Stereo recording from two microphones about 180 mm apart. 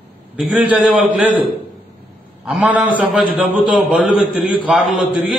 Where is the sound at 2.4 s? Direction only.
5° right (ahead or behind).